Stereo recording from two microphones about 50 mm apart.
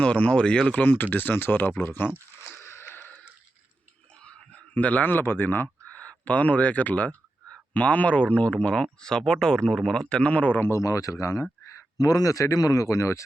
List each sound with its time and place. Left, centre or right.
0.0 s speech: left
0.7 s speech: left
1.8 s a sound: left
4.1 s a sound: centre
5.0 s speech: left
5.9 s speech: left
10.7 s speech: left